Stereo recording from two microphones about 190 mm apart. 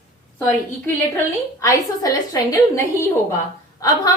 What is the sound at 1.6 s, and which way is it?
A woman's voice, 15° left (ahead or behind).